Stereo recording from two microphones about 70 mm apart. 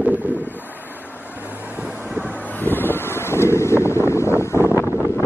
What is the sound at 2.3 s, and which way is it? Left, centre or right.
Wind, left.